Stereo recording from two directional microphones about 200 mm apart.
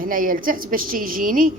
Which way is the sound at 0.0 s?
45° right (ahead or behind).